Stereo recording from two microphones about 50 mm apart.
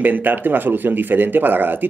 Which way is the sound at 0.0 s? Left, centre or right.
Right.